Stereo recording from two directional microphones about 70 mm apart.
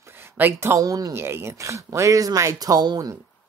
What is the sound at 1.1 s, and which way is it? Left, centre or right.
Speech, right.